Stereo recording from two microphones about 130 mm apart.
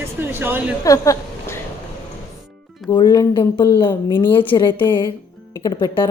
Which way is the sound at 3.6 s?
15° left (ahead or behind).